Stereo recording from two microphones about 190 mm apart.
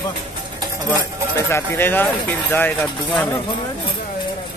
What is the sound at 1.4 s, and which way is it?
Speech, 15° left (ahead or behind).